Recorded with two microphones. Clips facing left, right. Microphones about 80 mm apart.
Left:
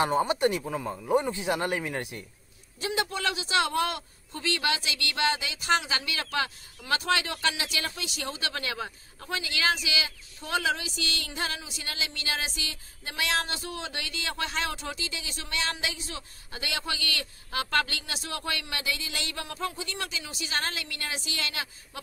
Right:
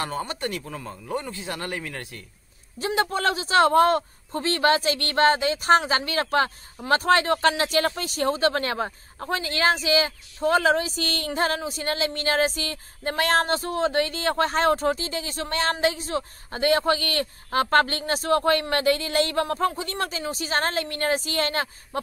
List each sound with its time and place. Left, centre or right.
0.0 s speech: centre
2.8 s a man's voice: right